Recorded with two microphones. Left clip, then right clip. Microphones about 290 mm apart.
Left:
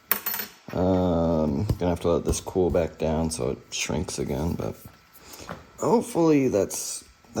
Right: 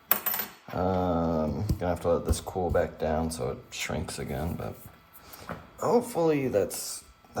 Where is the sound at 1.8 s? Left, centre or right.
Left.